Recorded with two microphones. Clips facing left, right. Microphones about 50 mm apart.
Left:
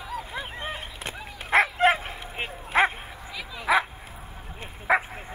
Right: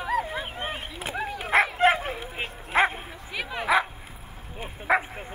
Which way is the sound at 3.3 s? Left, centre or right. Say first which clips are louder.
Right 7 dB; right.